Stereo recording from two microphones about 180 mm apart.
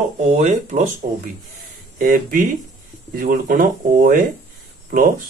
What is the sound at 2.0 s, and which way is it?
Speech, 50° right (ahead or behind).